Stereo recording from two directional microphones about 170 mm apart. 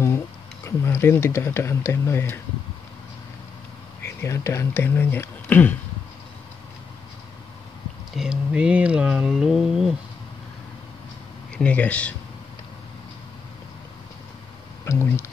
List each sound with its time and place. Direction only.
0.7 s speech: 15° left (ahead or behind)
4.0 s speech: 15° left (ahead or behind)
8.2 s speech: 5° right (ahead or behind)
11.5 s speech: 5° left (ahead or behind)
14.9 s speech: 15° left (ahead or behind)